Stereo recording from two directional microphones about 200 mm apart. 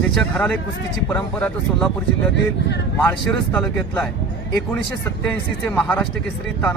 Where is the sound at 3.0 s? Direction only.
10° left (ahead or behind).